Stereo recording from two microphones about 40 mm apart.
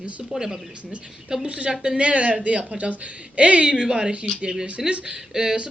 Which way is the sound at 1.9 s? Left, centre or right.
Right.